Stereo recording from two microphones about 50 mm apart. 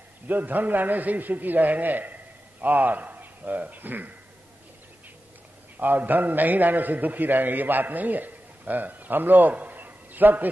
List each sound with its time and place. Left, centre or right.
0.3 s a man's voice: right
5.8 s a man's voice: right